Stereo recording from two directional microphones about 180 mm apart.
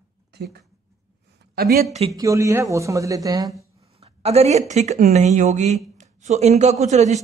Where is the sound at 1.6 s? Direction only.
55° right (ahead or behind).